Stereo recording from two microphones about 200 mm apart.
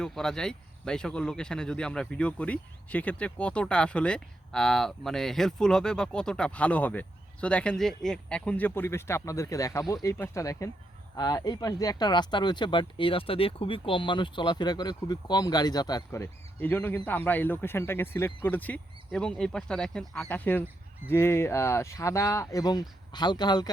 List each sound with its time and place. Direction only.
0.0 s speech: 5° left (ahead or behind); by 23.7 s 20° left (ahead or behind)